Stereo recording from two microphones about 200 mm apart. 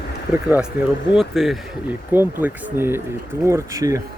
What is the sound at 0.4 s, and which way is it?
Speech, 5° right (ahead or behind).